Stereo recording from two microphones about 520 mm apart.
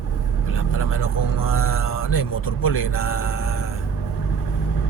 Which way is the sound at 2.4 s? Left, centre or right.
Left.